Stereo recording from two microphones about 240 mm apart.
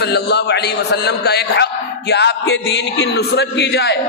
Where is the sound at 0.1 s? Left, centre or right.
Left.